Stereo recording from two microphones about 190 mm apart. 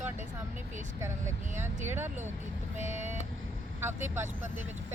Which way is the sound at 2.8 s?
40° right (ahead or behind).